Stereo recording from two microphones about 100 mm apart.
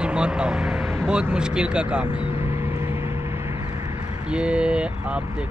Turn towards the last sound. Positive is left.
turn(degrees=-10)  # may be behind; listen again after turning